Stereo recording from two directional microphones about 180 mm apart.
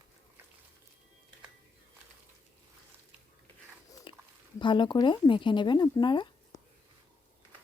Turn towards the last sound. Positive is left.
turn(degrees=25)  # may be behind; listen again after turning